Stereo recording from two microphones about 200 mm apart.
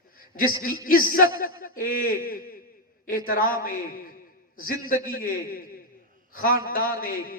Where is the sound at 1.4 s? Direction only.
45° left (ahead or behind).